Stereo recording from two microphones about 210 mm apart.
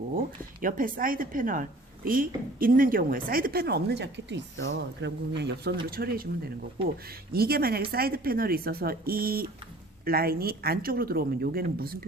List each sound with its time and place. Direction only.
0.6 s a woman's voice: 40° right (ahead or behind)
7.3 s a woman's voice: 45° right (ahead or behind)